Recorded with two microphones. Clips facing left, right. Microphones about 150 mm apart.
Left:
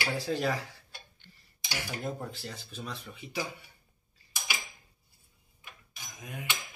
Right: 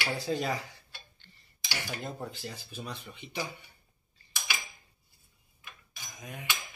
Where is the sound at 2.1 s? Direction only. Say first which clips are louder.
Even; 5° right (ahead or behind).